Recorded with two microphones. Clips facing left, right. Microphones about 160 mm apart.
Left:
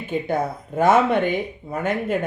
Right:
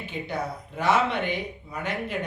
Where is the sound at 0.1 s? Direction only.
50° left (ahead or behind).